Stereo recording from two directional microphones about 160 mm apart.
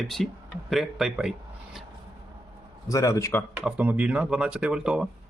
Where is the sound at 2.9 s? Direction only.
20° left (ahead or behind).